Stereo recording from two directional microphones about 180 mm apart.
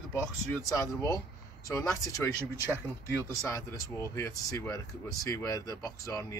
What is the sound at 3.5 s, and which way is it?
Speech, 15° left (ahead or behind).